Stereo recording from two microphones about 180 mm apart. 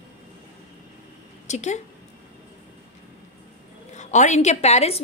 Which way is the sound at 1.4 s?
40° left (ahead or behind).